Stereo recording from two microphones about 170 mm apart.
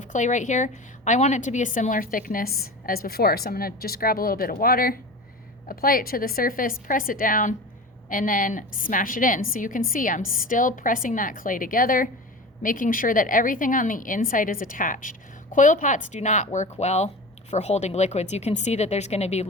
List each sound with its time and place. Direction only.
0.0 s a woman's voice: 45° left (ahead or behind)